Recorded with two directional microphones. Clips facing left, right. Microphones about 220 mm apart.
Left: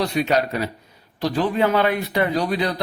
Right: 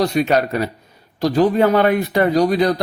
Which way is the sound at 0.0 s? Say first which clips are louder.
Right 4 dB; 45° right (ahead or behind).